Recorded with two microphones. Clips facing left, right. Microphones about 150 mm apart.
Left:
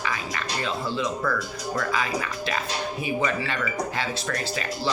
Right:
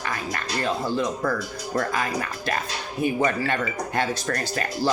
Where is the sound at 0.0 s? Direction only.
50° right (ahead or behind).